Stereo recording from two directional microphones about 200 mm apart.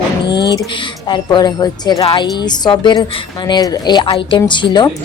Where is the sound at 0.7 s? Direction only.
25° left (ahead or behind).